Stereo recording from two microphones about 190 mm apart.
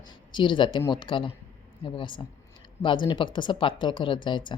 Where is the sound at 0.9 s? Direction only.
25° left (ahead or behind).